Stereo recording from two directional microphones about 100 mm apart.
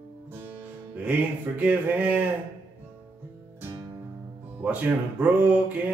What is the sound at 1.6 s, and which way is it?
Mantra, 15° right (ahead or behind).